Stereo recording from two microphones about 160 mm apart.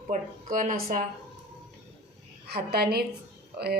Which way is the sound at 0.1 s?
55° right (ahead or behind).